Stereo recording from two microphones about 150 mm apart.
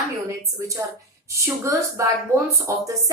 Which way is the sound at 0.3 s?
20° right (ahead or behind).